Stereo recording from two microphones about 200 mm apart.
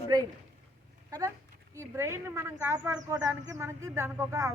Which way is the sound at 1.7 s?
15° right (ahead or behind).